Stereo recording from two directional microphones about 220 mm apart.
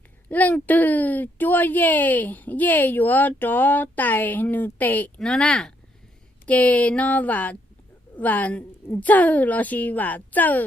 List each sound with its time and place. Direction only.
0.3 s speech: 5° left (ahead or behind)